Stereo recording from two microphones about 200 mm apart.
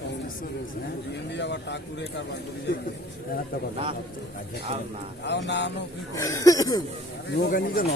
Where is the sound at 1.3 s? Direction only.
60° left (ahead or behind).